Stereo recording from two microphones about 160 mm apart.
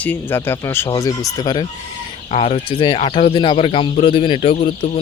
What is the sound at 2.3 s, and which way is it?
Speech, 35° left (ahead or behind).